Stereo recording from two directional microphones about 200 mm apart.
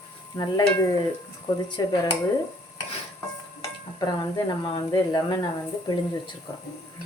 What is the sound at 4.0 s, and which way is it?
Speech, 20° left (ahead or behind).